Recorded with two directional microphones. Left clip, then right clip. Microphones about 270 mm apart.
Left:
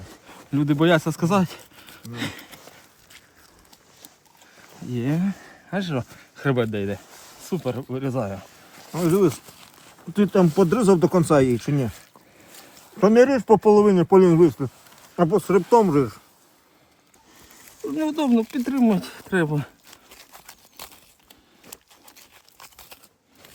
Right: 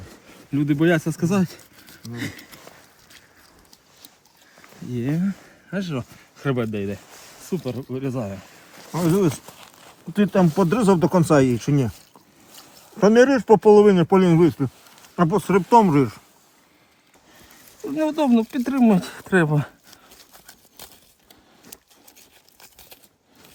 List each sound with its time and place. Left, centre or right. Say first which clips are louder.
0.5 s speech: left 1 dB; left
1.9 s speech: left 1 dB; centre
4.9 s speech: even; left
5.7 s speech: left 2 dB; left
9.0 s speech: left 1 dB; right
9.6 s speech: right 2 dB; centre
13.0 s speech: right 1 dB; right
15.8 s speech: right 1 dB; right
17.8 s speech: right 2 dB; right
20.3 s a sound: left 2 dB; centre
22.6 s a sound: left 2 dB; centre